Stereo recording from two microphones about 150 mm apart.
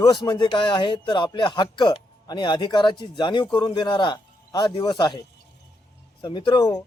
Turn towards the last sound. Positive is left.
turn(degrees=30)  # may be behind; listen again after turning